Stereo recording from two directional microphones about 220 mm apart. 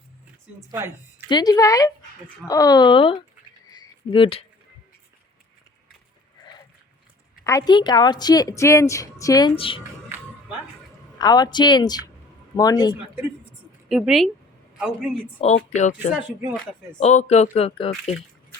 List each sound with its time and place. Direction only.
1.3 s a woman's voice: 20° left (ahead or behind)
3.7 s a sound: 20° left (ahead or behind)
7.4 s a woman's voice: 15° left (ahead or behind)
11.2 s a woman's voice: 20° left (ahead or behind)
13.8 s a woman's voice: centre (ahead or behind)
15.4 s speech: 30° left (ahead or behind)